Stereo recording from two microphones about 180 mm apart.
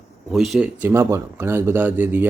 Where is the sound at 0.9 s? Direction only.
15° right (ahead or behind).